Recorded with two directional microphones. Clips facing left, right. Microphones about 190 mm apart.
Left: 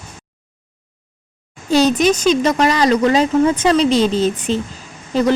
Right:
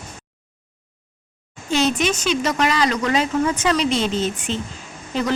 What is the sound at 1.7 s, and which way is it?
Speech, 40° left (ahead or behind).